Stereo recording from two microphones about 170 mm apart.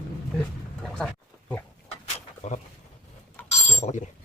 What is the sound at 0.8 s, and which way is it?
Pig, 5° left (ahead or behind).